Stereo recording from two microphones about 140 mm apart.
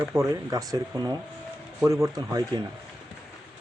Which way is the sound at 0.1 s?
20° right (ahead or behind).